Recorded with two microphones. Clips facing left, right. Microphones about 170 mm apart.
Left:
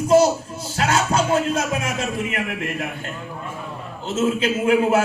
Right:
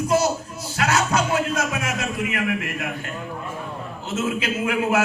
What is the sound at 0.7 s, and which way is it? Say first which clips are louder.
Speech: left 1 dB; 30° left (ahead or behind).